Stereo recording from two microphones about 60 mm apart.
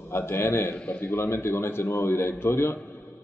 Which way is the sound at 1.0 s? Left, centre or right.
Left.